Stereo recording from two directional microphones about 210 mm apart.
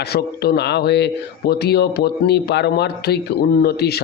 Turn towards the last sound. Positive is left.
turn(degrees=50)  # may be behind; listen again after turning